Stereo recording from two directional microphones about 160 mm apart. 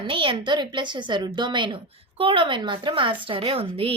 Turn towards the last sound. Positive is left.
turn(degrees=-35)  # may be behind; listen again after turning